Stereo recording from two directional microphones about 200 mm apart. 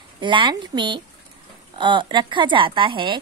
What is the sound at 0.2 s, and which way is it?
A woman's voice, 25° right (ahead or behind).